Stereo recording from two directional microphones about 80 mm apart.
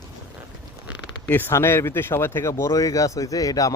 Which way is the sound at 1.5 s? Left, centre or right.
Left.